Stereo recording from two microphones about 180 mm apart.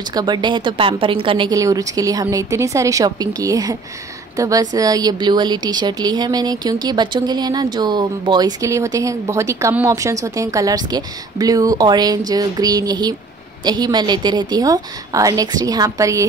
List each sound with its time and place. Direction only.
0.1 s a woman's voice: 25° right (ahead or behind)